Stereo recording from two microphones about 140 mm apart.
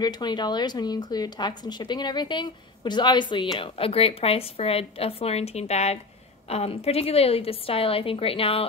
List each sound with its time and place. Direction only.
0.0 s a woman's voice: 30° left (ahead or behind)